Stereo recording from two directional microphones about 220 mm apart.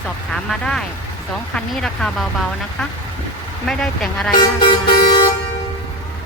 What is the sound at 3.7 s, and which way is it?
Speech, centre (ahead or behind).